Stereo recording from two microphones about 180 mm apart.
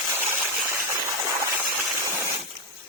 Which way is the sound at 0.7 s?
15° right (ahead or behind).